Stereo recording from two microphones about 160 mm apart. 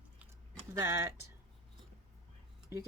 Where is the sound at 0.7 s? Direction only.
15° right (ahead or behind).